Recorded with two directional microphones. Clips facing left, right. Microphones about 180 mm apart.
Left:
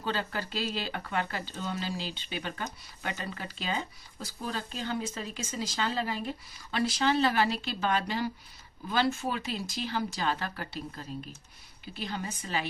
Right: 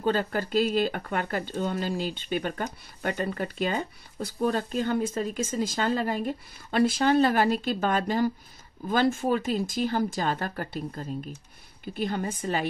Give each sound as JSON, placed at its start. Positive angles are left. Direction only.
{"t": 0.0, "sound": "speech", "side_deg": -45}